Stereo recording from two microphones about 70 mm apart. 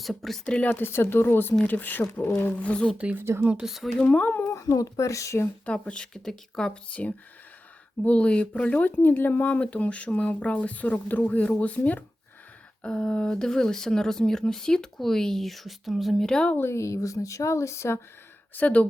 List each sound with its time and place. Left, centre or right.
0.0 s speech: centre
3.0 s speech: right
3.6 s speech: centre
4.0 s speech: centre
4.3 s a child's voice: left
4.5 s speech: left
5.6 s speech: centre
8.0 s speech: centre
16.6 s speech: left
18.5 s speech: left